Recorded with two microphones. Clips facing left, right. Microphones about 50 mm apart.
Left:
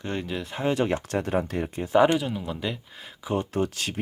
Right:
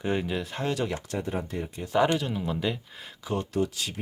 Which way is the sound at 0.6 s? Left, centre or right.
Left.